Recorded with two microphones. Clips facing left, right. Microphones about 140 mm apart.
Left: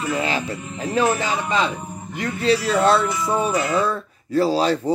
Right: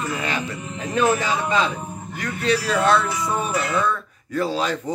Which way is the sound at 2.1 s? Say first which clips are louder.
Left 3 dB; 30° left (ahead or behind).